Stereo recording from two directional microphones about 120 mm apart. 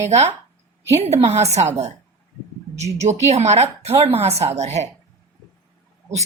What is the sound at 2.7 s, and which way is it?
A woman's voice, 70° right (ahead or behind).